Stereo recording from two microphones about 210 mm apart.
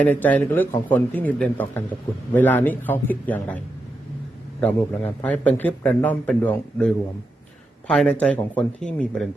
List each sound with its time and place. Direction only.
0.0 s a man's voice: 10° left (ahead or behind)
4.6 s a man's voice: 5° left (ahead or behind)